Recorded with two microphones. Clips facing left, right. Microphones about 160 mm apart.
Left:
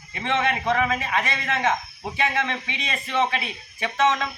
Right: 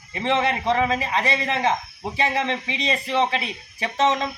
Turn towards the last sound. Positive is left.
turn(degrees=-35)  # may be behind; listen again after turning